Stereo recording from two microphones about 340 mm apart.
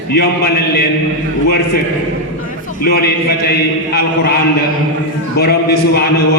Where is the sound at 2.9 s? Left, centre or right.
Left.